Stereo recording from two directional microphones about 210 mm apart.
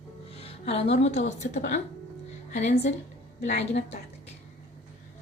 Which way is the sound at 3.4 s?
35° left (ahead or behind).